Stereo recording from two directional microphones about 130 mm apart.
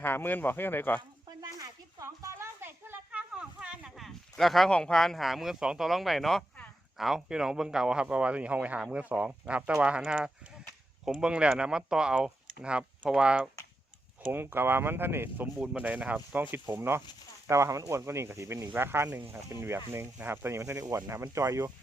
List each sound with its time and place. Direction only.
0.0 s speech: 15° left (ahead or behind)
1.4 s a child's voice: 25° right (ahead or behind)